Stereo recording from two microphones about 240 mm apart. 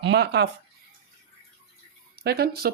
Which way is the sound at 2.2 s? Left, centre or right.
Right.